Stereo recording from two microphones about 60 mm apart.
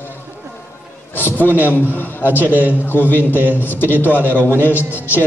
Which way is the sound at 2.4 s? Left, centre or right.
Right.